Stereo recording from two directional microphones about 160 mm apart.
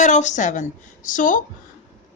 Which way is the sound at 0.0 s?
50° left (ahead or behind).